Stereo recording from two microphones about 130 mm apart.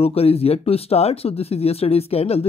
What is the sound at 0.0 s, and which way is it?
Speech, 50° left (ahead or behind).